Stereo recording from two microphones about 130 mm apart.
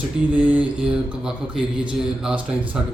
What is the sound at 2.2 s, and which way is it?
Speech, 5° right (ahead or behind).